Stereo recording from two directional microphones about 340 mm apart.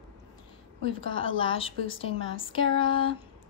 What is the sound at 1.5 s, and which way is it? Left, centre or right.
Speech, centre.